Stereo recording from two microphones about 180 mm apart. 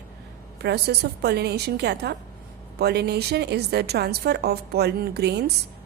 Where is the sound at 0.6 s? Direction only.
65° right (ahead or behind).